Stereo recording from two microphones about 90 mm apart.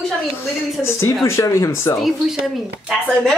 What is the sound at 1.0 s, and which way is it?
Speech, 35° left (ahead or behind).